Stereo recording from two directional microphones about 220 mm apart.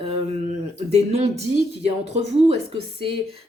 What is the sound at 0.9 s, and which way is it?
Speech, 30° right (ahead or behind).